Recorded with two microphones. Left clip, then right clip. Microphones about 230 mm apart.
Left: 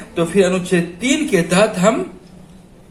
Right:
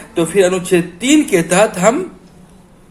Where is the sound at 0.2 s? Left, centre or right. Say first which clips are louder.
Right 3 dB; right.